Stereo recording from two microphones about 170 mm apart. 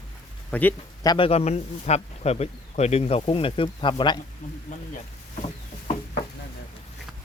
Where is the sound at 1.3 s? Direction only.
40° left (ahead or behind).